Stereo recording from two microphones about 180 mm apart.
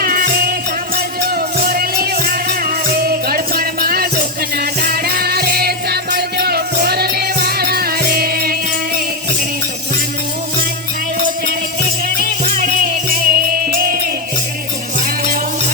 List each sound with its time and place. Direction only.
0.0 s music: 55° right (ahead or behind)
12.0 s music: 50° right (ahead or behind)